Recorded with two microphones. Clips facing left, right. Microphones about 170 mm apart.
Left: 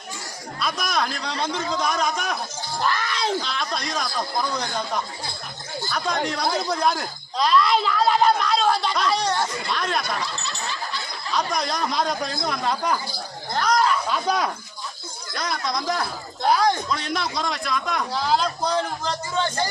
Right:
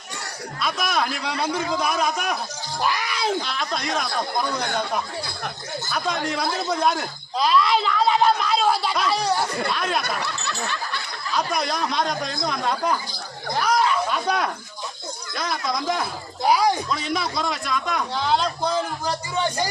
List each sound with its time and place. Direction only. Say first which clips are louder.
0.6 s a man's voice: right 1 dB; 5° right (ahead or behind)
10.0 s a sound: even; 65° right (ahead or behind)
11.3 s a man's voice: right 1 dB; 5° right (ahead or behind)